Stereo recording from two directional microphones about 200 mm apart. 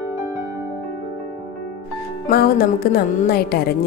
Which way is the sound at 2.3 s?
50° left (ahead or behind).